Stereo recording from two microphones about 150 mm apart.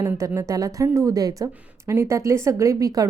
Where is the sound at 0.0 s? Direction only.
15° right (ahead or behind).